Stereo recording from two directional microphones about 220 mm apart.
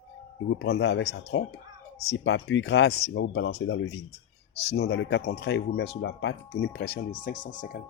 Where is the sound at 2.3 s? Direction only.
55° left (ahead or behind).